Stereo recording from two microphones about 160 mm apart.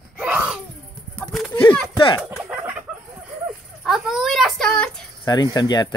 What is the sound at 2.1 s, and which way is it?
Chicken, 10° right (ahead or behind).